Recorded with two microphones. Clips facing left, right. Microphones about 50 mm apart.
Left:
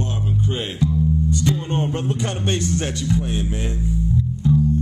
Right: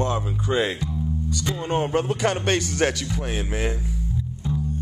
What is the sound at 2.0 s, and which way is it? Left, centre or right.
Speech, right.